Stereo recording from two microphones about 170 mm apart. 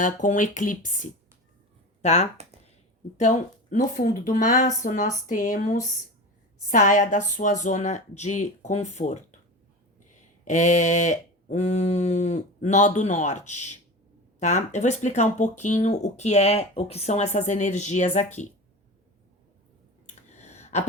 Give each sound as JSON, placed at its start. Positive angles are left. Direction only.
{"t": 0.0, "sound": "speech", "side_deg": 50}
{"t": 10.4, "sound": "speech", "side_deg": 45}
{"t": 20.4, "sound": "a sound", "side_deg": 40}